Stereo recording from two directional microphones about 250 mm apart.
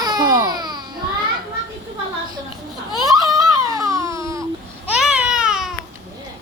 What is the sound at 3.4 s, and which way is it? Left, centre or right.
Baby cry, centre.